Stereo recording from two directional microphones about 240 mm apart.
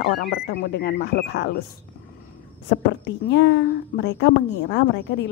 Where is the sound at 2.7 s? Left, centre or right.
Left.